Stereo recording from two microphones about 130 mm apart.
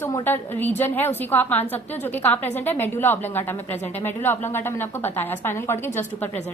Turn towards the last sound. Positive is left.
turn(degrees=15)  # may be behind; listen again after turning